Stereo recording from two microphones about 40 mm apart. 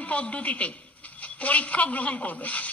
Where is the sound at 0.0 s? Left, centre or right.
Left.